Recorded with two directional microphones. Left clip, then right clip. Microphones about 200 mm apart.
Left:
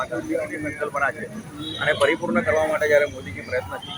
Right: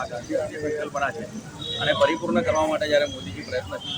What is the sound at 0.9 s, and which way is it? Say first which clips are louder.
Speech: left 3 dB; 5° right (ahead or behind).